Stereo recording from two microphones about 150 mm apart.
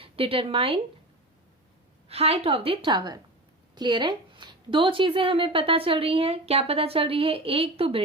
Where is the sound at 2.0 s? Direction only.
40° right (ahead or behind).